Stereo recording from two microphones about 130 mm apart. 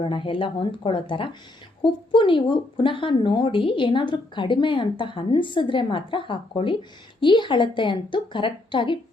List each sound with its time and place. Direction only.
0.0 s speech: 40° left (ahead or behind)